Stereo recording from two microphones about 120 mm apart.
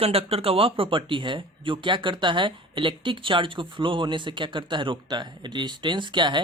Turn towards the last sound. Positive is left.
turn(degrees=-40)  # may be behind; listen again after turning